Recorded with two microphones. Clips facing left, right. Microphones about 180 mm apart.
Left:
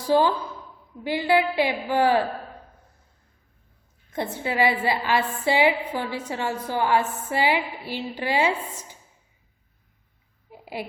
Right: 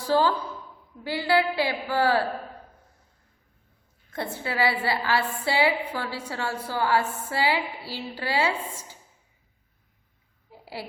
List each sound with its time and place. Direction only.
0.0 s a woman's voice: 15° left (ahead or behind)
4.1 s a woman's voice: 20° left (ahead or behind)
10.5 s a sound: 20° left (ahead or behind)